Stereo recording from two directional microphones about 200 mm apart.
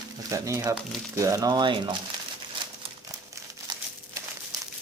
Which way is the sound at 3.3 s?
15° right (ahead or behind).